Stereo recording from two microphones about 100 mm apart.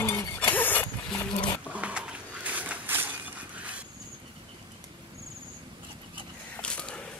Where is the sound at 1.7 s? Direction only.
15° right (ahead or behind).